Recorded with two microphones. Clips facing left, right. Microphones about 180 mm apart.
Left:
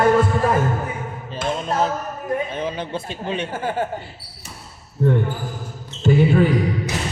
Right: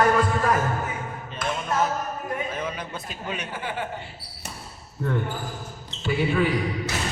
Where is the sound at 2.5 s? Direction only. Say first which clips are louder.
Left 6 dB; 30° left (ahead or behind).